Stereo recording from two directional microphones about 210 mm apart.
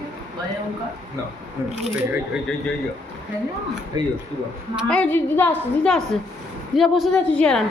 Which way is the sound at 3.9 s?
20° right (ahead or behind).